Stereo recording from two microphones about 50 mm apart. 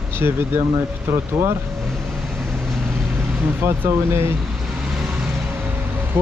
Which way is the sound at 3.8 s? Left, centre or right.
Right.